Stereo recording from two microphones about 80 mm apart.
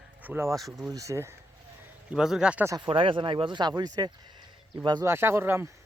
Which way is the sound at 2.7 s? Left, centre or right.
Right.